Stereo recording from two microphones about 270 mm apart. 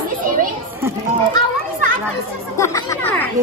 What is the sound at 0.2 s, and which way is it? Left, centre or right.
Children playing, right.